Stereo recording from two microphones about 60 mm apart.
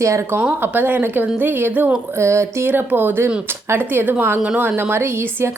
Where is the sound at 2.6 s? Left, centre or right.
Right.